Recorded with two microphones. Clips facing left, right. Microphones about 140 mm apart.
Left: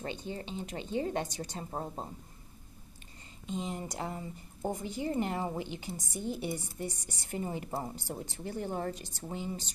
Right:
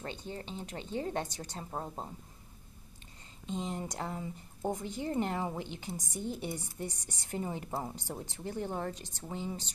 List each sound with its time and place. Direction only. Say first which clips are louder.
0.0 s a woman's voice: left 3 dB; 10° left (ahead or behind)
3.4 s a woman's voice: even; 5° left (ahead or behind)